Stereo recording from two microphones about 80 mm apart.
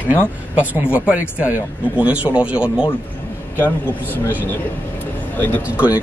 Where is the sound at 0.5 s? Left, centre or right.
Centre.